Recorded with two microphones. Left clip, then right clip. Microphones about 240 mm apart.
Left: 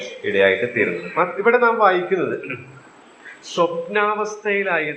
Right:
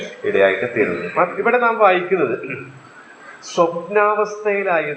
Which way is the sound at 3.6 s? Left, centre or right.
Left.